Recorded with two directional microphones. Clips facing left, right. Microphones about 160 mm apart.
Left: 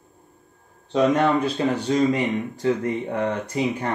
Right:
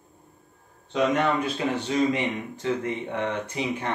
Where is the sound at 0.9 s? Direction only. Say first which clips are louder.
Left 4 dB; 35° left (ahead or behind).